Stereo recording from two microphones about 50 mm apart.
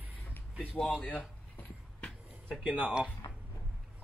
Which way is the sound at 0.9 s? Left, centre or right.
Left.